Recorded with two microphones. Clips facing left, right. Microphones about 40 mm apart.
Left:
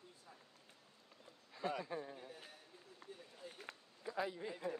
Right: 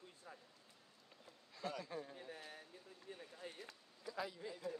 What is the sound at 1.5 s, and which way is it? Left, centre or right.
Speech, left.